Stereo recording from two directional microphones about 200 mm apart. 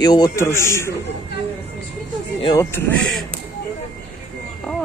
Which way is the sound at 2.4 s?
15° left (ahead or behind).